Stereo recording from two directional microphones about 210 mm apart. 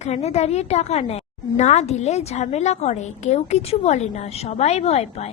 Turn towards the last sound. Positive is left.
turn(degrees=30)  # may be behind; listen again after turning